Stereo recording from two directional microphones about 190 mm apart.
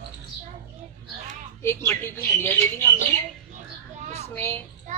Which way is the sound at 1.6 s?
15° left (ahead or behind).